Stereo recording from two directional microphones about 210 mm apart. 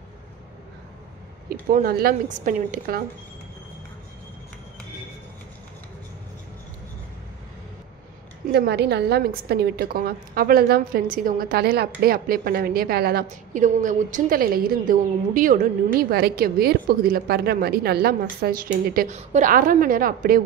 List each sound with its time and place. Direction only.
1.5 s a woman's voice: 45° right (ahead or behind)
8.5 s a woman's voice: 50° right (ahead or behind)